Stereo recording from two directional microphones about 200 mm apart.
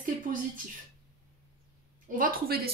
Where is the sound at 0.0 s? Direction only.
45° right (ahead or behind).